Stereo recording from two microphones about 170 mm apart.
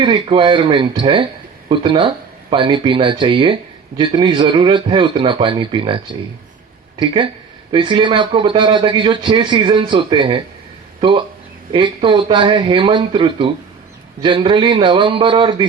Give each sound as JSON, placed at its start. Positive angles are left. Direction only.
{"t": 0.0, "sound": "speech", "side_deg": -30}